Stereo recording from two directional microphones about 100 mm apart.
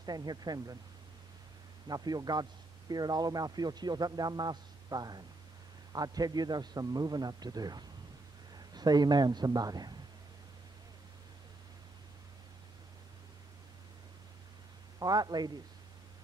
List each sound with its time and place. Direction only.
0.0 s a man's voice: 40° right (ahead or behind)
1.9 s a man's voice: 40° right (ahead or behind)
15.0 s a man's voice: 40° right (ahead or behind)